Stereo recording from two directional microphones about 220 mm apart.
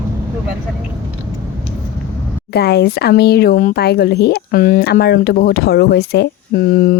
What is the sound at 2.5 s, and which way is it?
Speech, 45° left (ahead or behind).